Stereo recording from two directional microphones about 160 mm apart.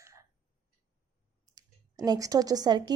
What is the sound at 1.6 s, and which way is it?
Speech, 25° right (ahead or behind).